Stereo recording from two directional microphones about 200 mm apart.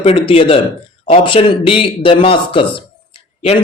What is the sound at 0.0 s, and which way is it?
Speech, 30° left (ahead or behind).